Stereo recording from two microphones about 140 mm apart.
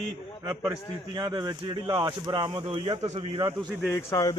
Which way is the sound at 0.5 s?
20° right (ahead or behind).